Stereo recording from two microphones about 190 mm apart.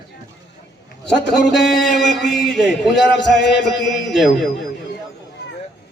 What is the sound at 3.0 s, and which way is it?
Chant, 65° left (ahead or behind).